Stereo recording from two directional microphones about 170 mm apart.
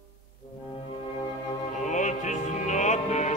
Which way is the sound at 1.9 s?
45° left (ahead or behind).